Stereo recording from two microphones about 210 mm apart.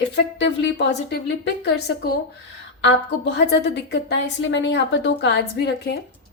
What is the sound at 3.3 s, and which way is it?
Speech, 55° left (ahead or behind).